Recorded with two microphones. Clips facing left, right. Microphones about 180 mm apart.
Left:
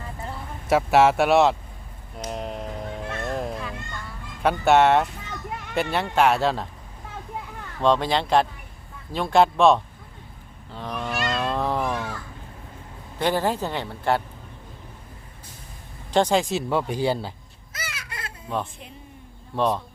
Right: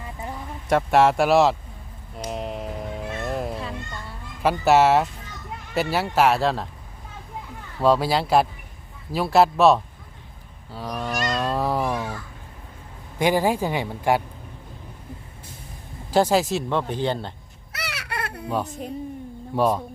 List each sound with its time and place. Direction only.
0.7 s speech: 5° left (ahead or behind)
2.2 s a sound: centre (ahead or behind)
3.6 s a sound: 30° right (ahead or behind)
4.4 s speech: centre (ahead or behind)
7.8 s a man's voice: 5° right (ahead or behind)
10.7 s goose: 5° right (ahead or behind)
11.1 s cat: 40° right (ahead or behind)
11.3 s a sound: 5° right (ahead or behind)
13.1 s a man's voice: 10° right (ahead or behind)
16.1 s speech: 5° right (ahead or behind)
17.7 s baby cry: 70° right (ahead or behind)
19.5 s a man's voice: 10° right (ahead or behind)